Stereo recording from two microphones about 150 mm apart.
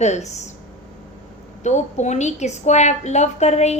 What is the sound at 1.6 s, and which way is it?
A woman's voice, 50° left (ahead or behind).